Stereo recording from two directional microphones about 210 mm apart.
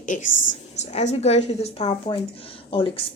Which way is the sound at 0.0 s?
35° left (ahead or behind).